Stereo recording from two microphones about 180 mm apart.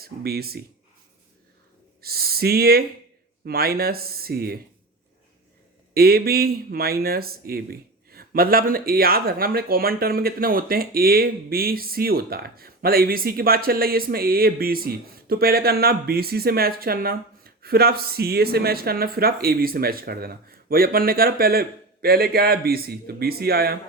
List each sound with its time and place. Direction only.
0.0 s speech: 60° right (ahead or behind)
2.0 s speech: 60° right (ahead or behind)
5.9 s speech: 55° right (ahead or behind)